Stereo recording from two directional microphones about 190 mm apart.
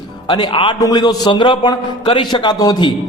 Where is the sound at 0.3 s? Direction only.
25° left (ahead or behind).